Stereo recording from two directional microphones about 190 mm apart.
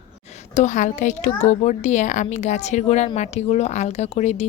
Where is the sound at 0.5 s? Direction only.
40° left (ahead or behind).